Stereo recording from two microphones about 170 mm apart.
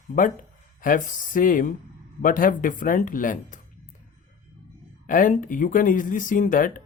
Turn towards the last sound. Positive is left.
turn(degrees=50)  # may be behind; listen again after turning